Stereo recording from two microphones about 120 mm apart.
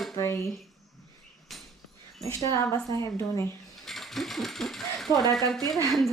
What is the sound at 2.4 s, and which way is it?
A woman's voice, 30° left (ahead or behind).